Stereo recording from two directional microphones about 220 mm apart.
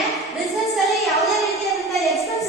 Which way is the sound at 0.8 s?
Centre (ahead or behind).